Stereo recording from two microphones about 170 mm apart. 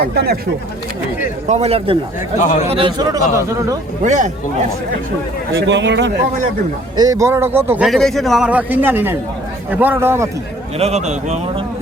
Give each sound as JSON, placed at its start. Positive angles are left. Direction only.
{"t": 0.0, "sound": "speech", "side_deg": -70}
{"t": 1.5, "sound": "a man's voice", "side_deg": -40}
{"t": 2.4, "sound": "a man's voice", "side_deg": 45}
{"t": 2.7, "sound": "a man's voice", "side_deg": -25}
{"t": 4.0, "sound": "speech", "side_deg": -45}
{"t": 5.6, "sound": "a man's voice", "side_deg": -90}
{"t": 6.9, "sound": "speech", "side_deg": -20}
{"t": 7.9, "sound": "a man's voice", "side_deg": 0}
{"t": 10.8, "sound": "a man's voice", "side_deg": -40}